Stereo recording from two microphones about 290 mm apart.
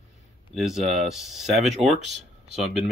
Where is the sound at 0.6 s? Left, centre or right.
Centre.